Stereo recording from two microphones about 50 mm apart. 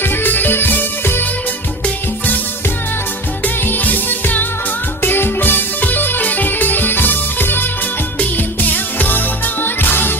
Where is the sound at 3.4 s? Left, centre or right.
Left.